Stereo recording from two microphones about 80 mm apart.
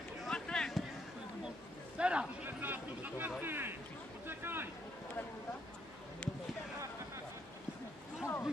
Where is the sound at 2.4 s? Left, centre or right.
Right.